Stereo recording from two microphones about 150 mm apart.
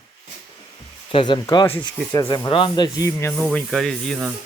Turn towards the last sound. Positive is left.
turn(degrees=5)  # may be behind; listen again after turning